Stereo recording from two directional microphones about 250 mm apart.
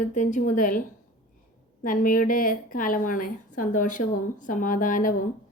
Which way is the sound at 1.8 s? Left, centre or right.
Left.